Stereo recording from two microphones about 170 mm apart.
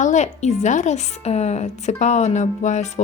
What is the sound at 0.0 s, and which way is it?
A woman's voice, 45° left (ahead or behind).